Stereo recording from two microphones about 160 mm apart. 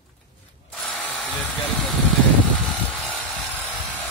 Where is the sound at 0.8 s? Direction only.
5° left (ahead or behind).